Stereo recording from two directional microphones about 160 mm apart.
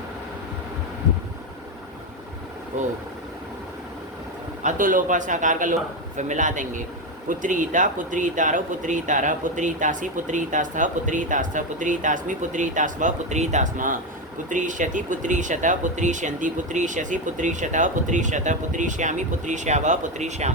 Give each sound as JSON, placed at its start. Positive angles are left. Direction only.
{"t": 4.6, "sound": "speech", "side_deg": -55}